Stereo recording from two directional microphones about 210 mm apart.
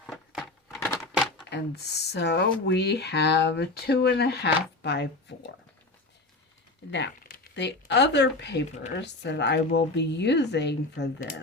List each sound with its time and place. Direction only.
0.0 s a sound: 5° left (ahead or behind)
1.5 s speech: 55° left (ahead or behind)
6.9 s speech: 50° left (ahead or behind)